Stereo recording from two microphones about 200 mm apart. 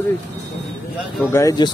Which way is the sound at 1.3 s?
15° left (ahead or behind).